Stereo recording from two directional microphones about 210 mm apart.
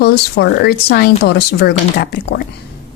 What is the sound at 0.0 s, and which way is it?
Speech, 50° left (ahead or behind).